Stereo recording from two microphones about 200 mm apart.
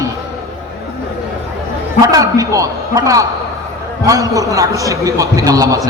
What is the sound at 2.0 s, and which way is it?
A man's voice, 15° right (ahead or behind).